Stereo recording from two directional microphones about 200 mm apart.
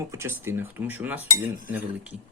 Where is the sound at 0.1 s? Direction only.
15° right (ahead or behind).